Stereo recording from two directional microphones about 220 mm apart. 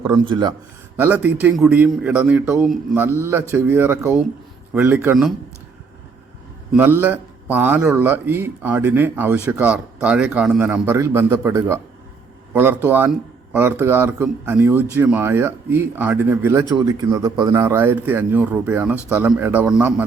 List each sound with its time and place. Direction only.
0.1 s speech: 20° right (ahead or behind)
0.9 s a man's voice: 10° right (ahead or behind)
6.7 s a man's voice: 10° right (ahead or behind)